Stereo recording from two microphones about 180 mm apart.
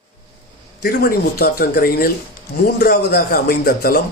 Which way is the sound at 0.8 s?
60° left (ahead or behind).